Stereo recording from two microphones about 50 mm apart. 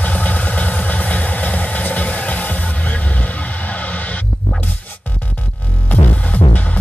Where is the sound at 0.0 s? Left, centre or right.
Left.